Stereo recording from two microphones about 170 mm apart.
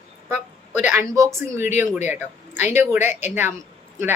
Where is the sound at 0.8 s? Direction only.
15° right (ahead or behind).